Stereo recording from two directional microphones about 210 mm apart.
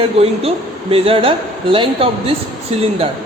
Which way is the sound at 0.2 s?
30° right (ahead or behind).